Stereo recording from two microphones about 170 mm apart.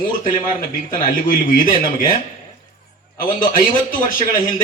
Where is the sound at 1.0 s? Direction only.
55° left (ahead or behind).